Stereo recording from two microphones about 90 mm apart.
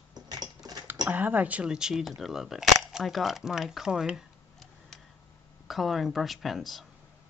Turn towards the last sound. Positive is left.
turn(degrees=0)  # may be behind; listen again after turning